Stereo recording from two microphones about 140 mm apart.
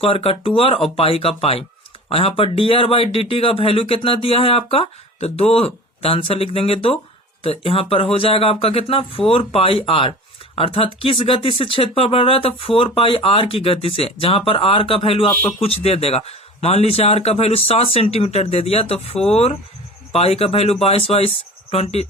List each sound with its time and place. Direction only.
0.0 s speech: 40° left (ahead or behind)
15.4 s speech: 15° left (ahead or behind)
15.6 s speech: 45° left (ahead or behind)